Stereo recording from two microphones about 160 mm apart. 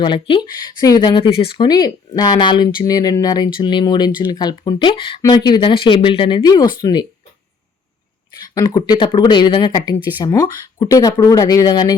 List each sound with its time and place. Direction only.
0.0 s speech: 30° left (ahead or behind)
8.4 s speech: 25° left (ahead or behind)